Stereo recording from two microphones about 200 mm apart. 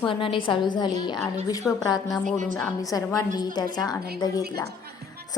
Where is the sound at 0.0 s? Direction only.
25° left (ahead or behind).